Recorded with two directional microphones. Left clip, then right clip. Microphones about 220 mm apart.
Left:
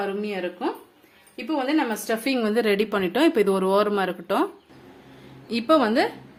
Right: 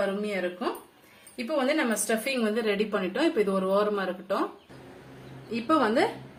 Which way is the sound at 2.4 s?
45° left (ahead or behind).